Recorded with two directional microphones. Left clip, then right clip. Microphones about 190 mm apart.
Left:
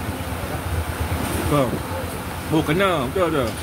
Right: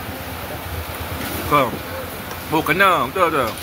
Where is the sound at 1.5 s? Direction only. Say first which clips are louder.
Right 5 dB; 10° left (ahead or behind).